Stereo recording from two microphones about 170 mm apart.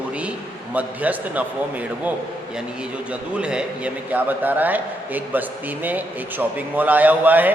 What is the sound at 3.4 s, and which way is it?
A man's voice, 5° right (ahead or behind).